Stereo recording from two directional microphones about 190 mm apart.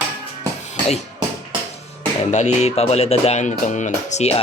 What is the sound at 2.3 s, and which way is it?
Speech, 35° left (ahead or behind).